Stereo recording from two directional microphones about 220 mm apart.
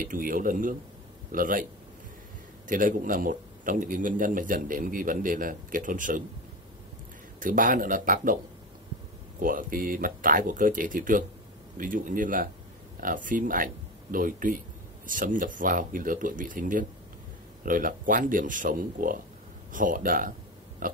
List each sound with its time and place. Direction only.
0.0 s a man's voice: 40° right (ahead or behind)
2.7 s a man's voice: 40° right (ahead or behind)
7.3 s a man's voice: 35° right (ahead or behind)
9.4 s a man's voice: 40° right (ahead or behind)
20.8 s a sound: 40° right (ahead or behind)